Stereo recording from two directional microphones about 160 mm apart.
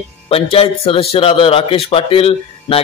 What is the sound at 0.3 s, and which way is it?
Speech, 35° left (ahead or behind).